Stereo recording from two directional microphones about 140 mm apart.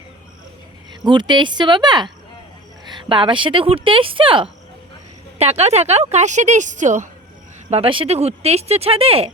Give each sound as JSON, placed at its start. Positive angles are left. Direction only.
{"t": 1.0, "sound": "speech", "side_deg": -35}
{"t": 5.4, "sound": "a woman's voice", "side_deg": -50}
{"t": 7.7, "sound": "speech", "side_deg": -40}